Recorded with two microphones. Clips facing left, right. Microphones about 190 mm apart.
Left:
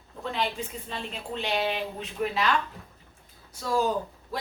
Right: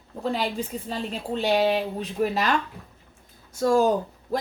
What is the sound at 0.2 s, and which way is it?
A woman's voice, 40° right (ahead or behind).